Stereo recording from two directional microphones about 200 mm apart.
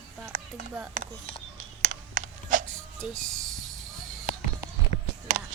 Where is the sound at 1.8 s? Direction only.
40° right (ahead or behind).